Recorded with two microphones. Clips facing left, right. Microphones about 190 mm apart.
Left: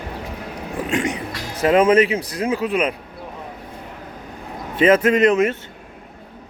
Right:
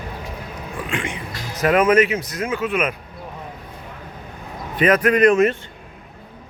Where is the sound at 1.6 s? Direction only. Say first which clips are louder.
Left 1 dB; 30° left (ahead or behind).